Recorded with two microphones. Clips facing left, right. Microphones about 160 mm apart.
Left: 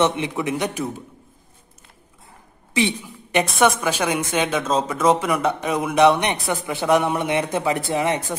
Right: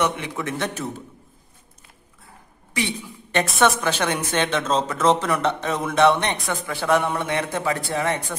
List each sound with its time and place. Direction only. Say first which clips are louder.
0.0 s speech: left 4 dB; 20° left (ahead or behind)
2.7 s a woman's voice: left 5 dB; 20° left (ahead or behind)
3.4 s a woman's voice: even; centre (ahead or behind); by 8.4 s 20° left (ahead or behind)